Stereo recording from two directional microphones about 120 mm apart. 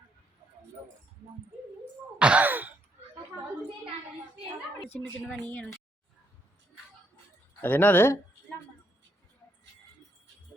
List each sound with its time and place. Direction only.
2.1 s gasp: 10° right (ahead or behind)
4.9 s a woman's voice: 10° left (ahead or behind)
7.6 s a woman's voice: 15° left (ahead or behind)